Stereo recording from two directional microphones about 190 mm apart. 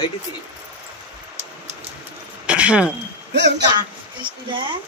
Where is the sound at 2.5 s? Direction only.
5° right (ahead or behind).